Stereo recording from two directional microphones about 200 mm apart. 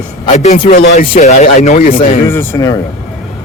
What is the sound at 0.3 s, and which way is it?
Speech, 35° left (ahead or behind).